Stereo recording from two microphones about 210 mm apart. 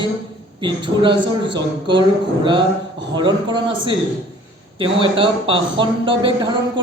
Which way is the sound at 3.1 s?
20° right (ahead or behind).